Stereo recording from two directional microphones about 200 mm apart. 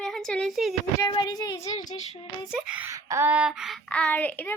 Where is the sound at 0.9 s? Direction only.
20° left (ahead or behind).